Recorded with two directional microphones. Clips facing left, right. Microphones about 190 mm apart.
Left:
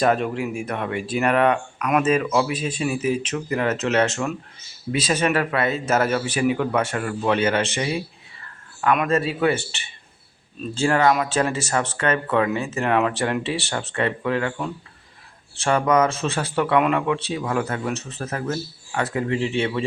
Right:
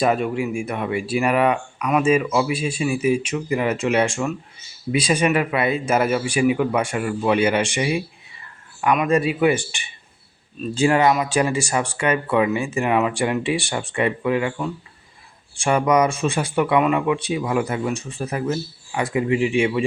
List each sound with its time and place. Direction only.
0.0 s speech: 5° right (ahead or behind)
9.0 s speech: 15° right (ahead or behind)